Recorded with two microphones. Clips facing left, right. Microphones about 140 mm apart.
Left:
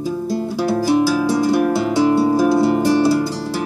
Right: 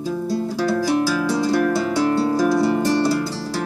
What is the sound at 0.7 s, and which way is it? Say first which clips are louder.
Music: left 4 dB; 15° left (ahead or behind).